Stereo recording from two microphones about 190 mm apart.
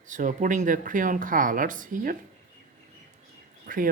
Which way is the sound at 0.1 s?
40° right (ahead or behind).